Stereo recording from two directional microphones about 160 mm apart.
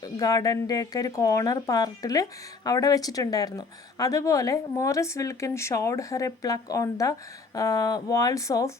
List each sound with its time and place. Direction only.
0.0 s a woman's voice: 25° left (ahead or behind)